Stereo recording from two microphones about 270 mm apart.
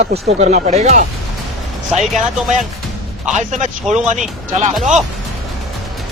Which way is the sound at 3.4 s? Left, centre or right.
Right.